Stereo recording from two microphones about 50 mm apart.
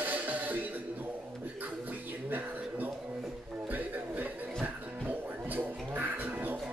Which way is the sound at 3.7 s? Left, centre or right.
Right.